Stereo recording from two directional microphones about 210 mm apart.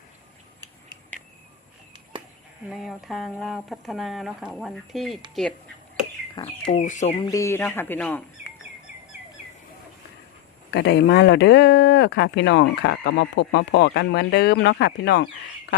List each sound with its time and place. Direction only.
2.6 s speech: centre (ahead or behind)
6.7 s speech: 35° left (ahead or behind)
7.2 s speech: 15° left (ahead or behind)
10.7 s speech: 55° left (ahead or behind)